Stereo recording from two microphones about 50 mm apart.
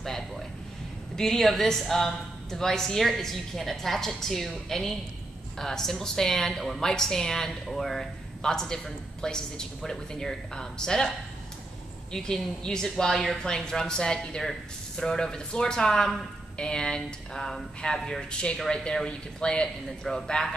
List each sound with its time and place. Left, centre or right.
1.1 s speech: centre
12.1 s speech: centre